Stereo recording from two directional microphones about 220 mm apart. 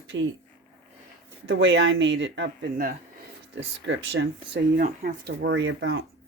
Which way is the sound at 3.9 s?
55° right (ahead or behind).